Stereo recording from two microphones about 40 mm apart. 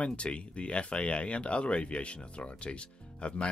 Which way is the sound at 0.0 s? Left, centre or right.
Left.